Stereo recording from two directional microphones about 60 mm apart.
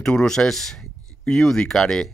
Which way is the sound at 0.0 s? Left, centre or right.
Centre.